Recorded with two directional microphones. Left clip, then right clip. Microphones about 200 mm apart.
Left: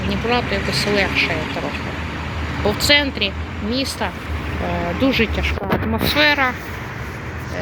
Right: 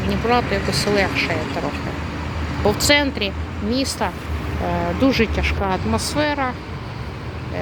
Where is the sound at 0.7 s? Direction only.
55° right (ahead or behind).